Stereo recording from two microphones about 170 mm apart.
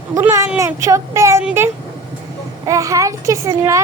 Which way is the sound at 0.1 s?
15° right (ahead or behind).